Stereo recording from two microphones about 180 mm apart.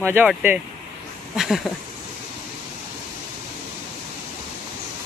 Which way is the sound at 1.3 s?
Centre (ahead or behind).